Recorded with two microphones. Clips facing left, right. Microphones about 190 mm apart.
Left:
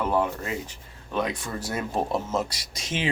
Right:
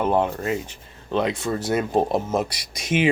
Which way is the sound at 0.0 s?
20° right (ahead or behind).